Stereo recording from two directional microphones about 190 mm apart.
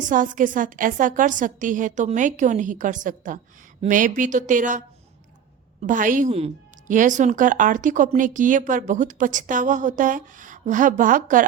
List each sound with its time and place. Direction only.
0.0 s a woman's voice: 45° right (ahead or behind)
5.8 s a woman's voice: 45° right (ahead or behind)